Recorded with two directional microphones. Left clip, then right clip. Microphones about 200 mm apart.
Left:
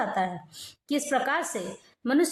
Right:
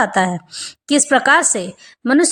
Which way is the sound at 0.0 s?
30° right (ahead or behind).